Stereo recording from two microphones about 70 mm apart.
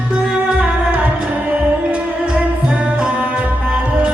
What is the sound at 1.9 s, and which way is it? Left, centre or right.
Music, centre.